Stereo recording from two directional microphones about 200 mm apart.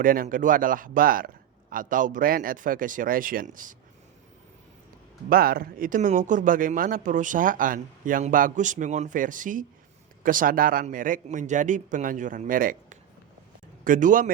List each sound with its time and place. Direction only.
0.0 s a man's voice: 45° right (ahead or behind)
5.3 s speech: 45° right (ahead or behind)